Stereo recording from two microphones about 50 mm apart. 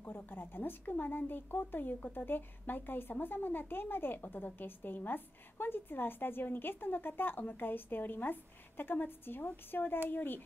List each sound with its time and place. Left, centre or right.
0.0 s speech: left